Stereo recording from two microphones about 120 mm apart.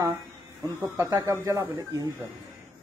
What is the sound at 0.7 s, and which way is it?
A man's voice, 25° right (ahead or behind).